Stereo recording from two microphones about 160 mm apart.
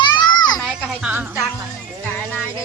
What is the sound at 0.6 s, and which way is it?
Children playing, 5° right (ahead or behind).